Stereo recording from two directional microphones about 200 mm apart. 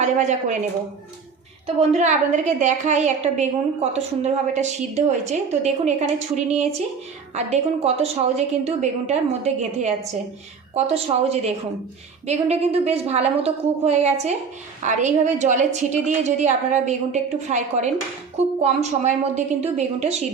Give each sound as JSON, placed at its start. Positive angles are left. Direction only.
{"t": 0.0, "sound": "a woman's voice", "side_deg": -35}
{"t": 1.6, "sound": "a woman's voice", "side_deg": -35}